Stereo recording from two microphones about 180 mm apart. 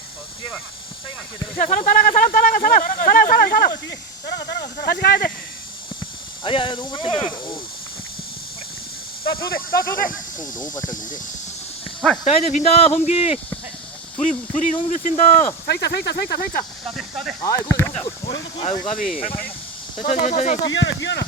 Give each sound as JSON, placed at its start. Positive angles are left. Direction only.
{"t": 1.5, "sound": "speech", "side_deg": 45}
{"t": 6.4, "sound": "speech", "side_deg": 30}
{"t": 9.4, "sound": "speech", "side_deg": 55}
{"t": 12.2, "sound": "speech", "side_deg": 35}
{"t": 15.6, "sound": "speech", "side_deg": 65}
{"t": 16.8, "sound": "speech", "side_deg": 0}
{"t": 17.7, "sound": "speech", "side_deg": 10}
{"t": 18.3, "sound": "speech", "side_deg": 30}
{"t": 20.0, "sound": "speech", "side_deg": 40}
{"t": 20.7, "sound": "speech", "side_deg": 90}